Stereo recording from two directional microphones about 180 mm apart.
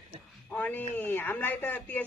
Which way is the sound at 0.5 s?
10° left (ahead or behind).